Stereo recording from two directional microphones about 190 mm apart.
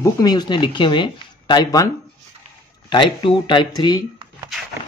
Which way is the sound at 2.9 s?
25° left (ahead or behind).